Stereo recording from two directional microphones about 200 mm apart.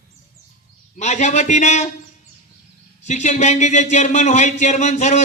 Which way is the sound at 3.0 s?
35° left (ahead or behind).